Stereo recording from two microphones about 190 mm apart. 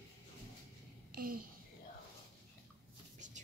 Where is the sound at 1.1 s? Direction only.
50° right (ahead or behind).